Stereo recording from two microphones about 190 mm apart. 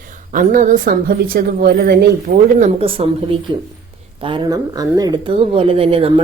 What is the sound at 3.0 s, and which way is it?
Speech, 30° right (ahead or behind).